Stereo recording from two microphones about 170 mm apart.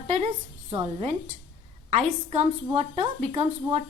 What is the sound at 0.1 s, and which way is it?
Speech, 40° right (ahead or behind).